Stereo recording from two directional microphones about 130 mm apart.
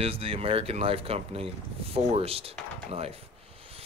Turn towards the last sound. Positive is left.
turn(degrees=-50)  # may be behind; listen again after turning